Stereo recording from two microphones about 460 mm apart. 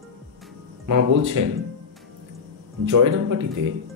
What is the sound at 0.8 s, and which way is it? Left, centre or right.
Speech, right.